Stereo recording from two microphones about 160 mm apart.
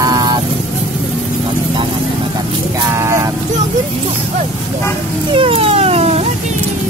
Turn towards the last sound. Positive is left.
turn(degrees=-40)  # may be behind; listen again after turning